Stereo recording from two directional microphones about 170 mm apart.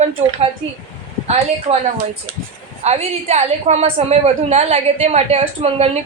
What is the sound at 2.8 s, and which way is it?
A woman's voice, 40° right (ahead or behind).